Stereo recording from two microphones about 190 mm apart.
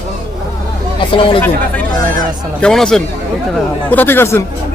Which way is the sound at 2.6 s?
Centre (ahead or behind).